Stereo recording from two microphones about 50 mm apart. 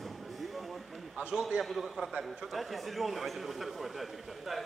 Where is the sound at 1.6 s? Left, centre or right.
Centre.